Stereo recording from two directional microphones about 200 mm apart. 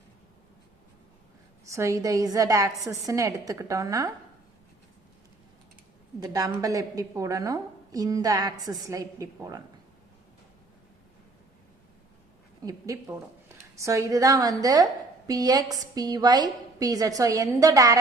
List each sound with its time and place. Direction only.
1.6 s a woman's voice: 15° right (ahead or behind)
6.1 s a woman's voice: 20° right (ahead or behind)
12.6 s a woman's voice: 15° right (ahead or behind)